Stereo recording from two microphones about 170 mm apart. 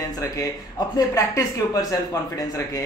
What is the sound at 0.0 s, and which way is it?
Speech, 20° left (ahead or behind).